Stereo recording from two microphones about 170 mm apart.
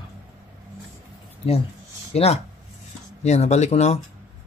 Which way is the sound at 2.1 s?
35° left (ahead or behind).